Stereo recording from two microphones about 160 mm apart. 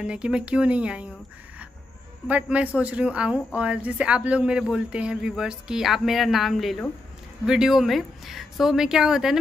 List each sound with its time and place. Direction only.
0.0 s speech: 5° right (ahead or behind)
2.2 s speech: 10° right (ahead or behind)